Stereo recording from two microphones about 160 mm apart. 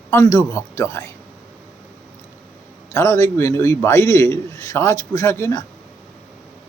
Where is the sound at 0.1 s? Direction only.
20° left (ahead or behind).